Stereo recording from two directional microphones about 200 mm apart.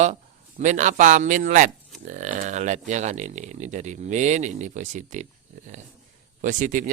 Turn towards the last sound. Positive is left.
turn(degrees=-40)  # may be behind; listen again after turning